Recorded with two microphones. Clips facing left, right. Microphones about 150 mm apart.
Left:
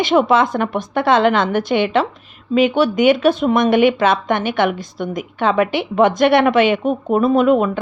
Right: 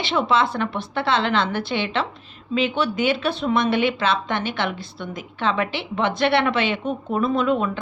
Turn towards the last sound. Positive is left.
turn(degrees=55)  # may be behind; listen again after turning